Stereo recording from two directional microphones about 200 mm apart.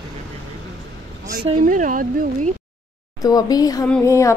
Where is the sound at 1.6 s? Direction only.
40° right (ahead or behind).